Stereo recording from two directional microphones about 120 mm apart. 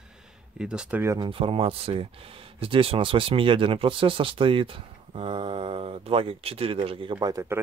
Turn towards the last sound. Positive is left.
turn(degrees=-25)  # may be behind; listen again after turning